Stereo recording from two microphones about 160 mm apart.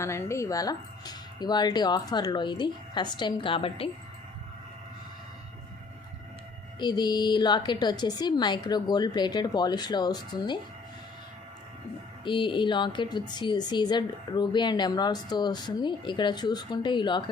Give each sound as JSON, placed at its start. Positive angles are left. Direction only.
{"t": 0.0, "sound": "a woman's voice", "side_deg": 15}
{"t": 6.7, "sound": "a woman's voice", "side_deg": 25}
{"t": 12.2, "sound": "a woman's voice", "side_deg": 30}